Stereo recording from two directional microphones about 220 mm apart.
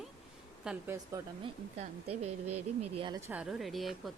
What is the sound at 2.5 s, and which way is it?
Speech, 90° right.